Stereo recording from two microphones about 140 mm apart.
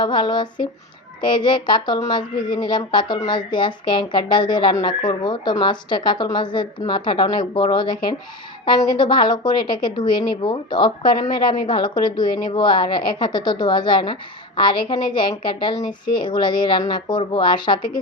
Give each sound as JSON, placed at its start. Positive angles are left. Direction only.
{"t": 0.0, "sound": "speech", "side_deg": 35}